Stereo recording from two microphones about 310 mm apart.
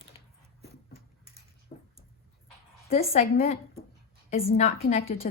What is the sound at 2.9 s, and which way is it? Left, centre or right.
A woman's voice, left.